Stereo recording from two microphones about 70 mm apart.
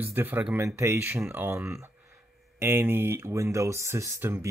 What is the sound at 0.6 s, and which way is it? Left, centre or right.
Speech, right.